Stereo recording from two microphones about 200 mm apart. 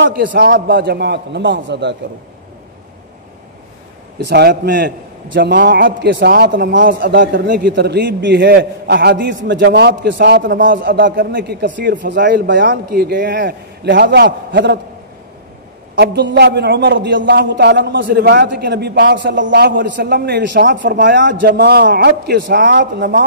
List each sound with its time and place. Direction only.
0.0 s a man's voice: 65° right (ahead or behind)
4.3 s a man's voice: 55° right (ahead or behind)
5.3 s a man's voice: 65° right (ahead or behind)
5.6 s a man's voice: 45° right (ahead or behind)
11.1 s a man's voice: 55° right (ahead or behind)
12.4 s a man's voice: 65° right (ahead or behind)
15.9 s a man's voice: 55° right (ahead or behind)